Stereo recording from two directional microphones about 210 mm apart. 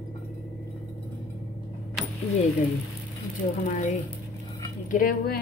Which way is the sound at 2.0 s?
Centre (ahead or behind).